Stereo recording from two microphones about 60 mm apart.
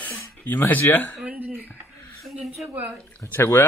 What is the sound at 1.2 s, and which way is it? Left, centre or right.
Speech, right.